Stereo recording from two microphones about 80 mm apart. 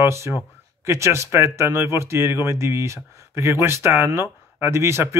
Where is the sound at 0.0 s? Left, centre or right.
Right.